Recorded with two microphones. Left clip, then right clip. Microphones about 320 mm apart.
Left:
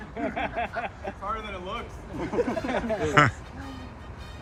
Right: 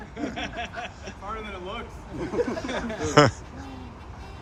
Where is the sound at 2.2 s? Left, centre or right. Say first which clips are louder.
Even; left.